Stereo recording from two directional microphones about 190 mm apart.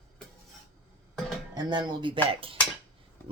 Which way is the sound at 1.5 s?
20° right (ahead or behind).